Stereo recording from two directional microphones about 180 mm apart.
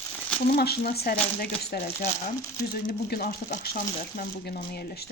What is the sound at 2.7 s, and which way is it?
Speech, 60° left (ahead or behind).